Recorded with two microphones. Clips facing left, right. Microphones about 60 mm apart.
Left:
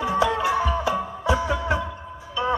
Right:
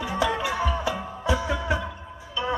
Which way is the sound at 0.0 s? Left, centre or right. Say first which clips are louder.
Left 4 dB; left.